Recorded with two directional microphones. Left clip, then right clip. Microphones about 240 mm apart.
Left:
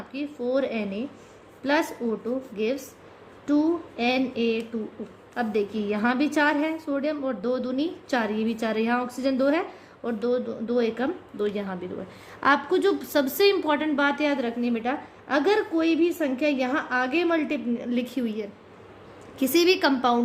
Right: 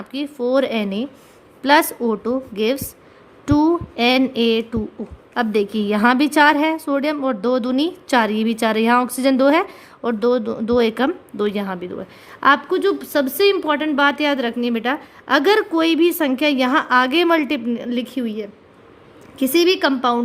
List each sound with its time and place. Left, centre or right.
0.1 s a woman's voice: right
3.4 s a sound: right
5.3 s a woman's voice: right